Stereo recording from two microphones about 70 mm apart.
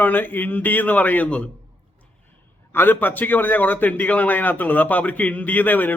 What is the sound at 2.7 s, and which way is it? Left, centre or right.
A man's voice, left.